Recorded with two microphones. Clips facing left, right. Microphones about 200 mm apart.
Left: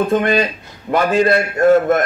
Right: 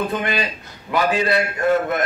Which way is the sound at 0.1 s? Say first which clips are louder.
Left 8 dB; 45° left (ahead or behind).